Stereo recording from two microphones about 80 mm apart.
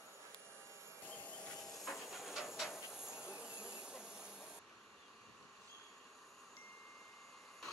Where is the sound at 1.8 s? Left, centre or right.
Centre.